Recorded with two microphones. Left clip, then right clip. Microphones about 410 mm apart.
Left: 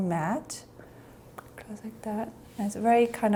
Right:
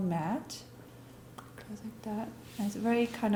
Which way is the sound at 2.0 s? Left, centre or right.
Left.